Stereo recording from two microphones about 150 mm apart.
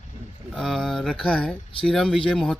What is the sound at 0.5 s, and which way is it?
Speech, centre (ahead or behind).